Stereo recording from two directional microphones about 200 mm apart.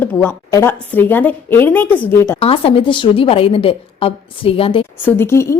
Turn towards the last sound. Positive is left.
turn(degrees=15)  # may be behind; listen again after turning